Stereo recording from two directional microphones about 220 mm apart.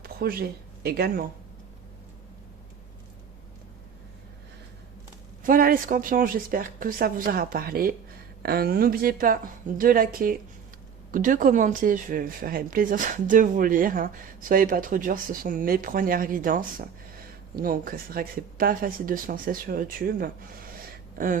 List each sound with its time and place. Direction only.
0.0 s speech: 45° right (ahead or behind)
5.4 s speech: 40° right (ahead or behind)